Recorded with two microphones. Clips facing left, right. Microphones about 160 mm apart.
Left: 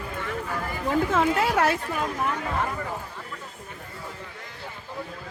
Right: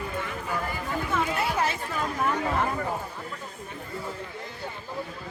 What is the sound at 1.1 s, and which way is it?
Speech, 90° left.